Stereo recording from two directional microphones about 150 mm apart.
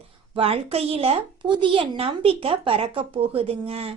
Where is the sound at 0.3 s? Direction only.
40° right (ahead or behind).